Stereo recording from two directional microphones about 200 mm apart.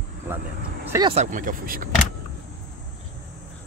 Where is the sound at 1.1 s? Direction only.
40° right (ahead or behind).